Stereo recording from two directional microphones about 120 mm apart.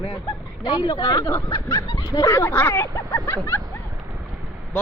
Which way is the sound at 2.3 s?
20° left (ahead or behind).